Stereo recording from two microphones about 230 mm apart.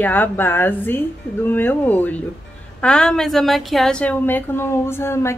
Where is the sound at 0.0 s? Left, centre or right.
Centre.